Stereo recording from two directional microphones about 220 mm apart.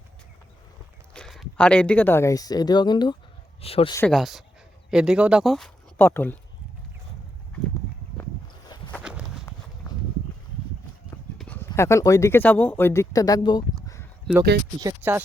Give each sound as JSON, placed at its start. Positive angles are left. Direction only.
{"t": 1.1, "sound": "speech", "side_deg": 0}
{"t": 3.9, "sound": "speech", "side_deg": 5}
{"t": 9.5, "sound": "walk", "side_deg": 10}
{"t": 11.3, "sound": "speech", "side_deg": 5}
{"t": 14.8, "sound": "speech", "side_deg": -15}